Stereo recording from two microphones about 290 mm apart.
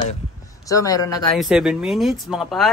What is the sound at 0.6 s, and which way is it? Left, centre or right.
Speech, centre.